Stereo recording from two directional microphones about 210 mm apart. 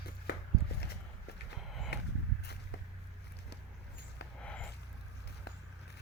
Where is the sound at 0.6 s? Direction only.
50° left (ahead or behind).